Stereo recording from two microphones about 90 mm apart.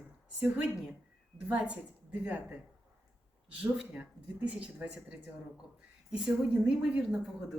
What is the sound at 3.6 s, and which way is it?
Speech, 15° right (ahead or behind).